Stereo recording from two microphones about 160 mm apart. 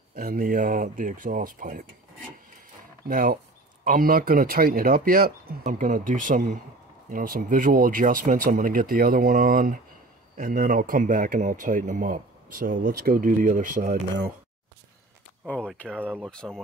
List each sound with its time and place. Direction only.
0.1 s speech: 70° right (ahead or behind)
3.1 s speech: 60° right (ahead or behind)
15.9 s speech: 10° right (ahead or behind)
16.3 s speech: 5° left (ahead or behind)